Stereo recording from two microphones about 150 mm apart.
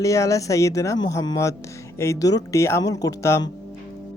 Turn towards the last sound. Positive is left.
turn(degrees=20)  # may be behind; listen again after turning